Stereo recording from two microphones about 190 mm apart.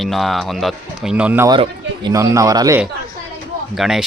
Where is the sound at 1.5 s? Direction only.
25° right (ahead or behind).